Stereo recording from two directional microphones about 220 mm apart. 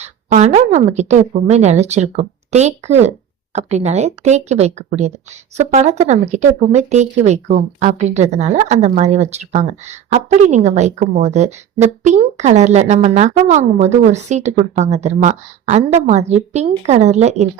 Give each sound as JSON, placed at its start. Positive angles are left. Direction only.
{"t": 0.0, "sound": "a woman's voice", "side_deg": -30}